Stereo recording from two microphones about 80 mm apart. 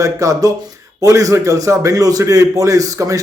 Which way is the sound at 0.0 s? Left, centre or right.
Right.